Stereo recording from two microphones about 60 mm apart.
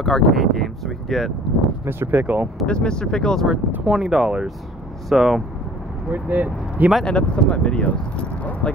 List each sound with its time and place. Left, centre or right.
0.0 s speech: centre
1.9 s speech: right
2.6 s speech: centre
3.8 s speech: centre
6.1 s speech: right
7.1 s speech: centre